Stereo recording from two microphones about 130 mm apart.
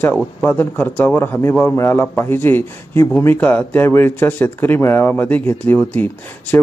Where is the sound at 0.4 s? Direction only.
15° left (ahead or behind).